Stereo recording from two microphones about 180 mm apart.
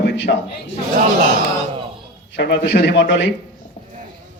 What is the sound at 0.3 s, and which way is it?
Speech, 50° left (ahead or behind).